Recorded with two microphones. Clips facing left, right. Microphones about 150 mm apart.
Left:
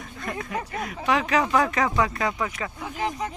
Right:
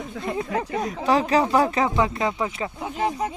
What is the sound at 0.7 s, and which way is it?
Speech, 35° right (ahead or behind).